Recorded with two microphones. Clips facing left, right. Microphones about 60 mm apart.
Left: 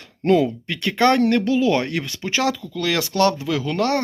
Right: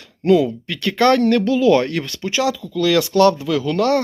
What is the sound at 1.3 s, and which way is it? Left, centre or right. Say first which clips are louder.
Speech: right 4 dB; centre.